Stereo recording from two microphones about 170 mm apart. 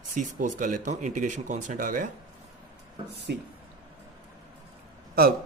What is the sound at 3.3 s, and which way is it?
Speech, 70° right (ahead or behind).